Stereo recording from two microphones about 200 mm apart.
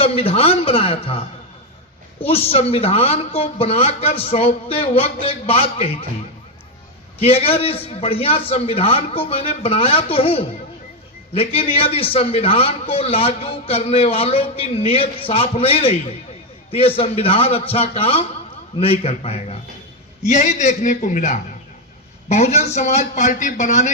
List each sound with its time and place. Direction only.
0.0 s a man's voice: 30° left (ahead or behind)
7.2 s a man's voice: 30° left (ahead or behind)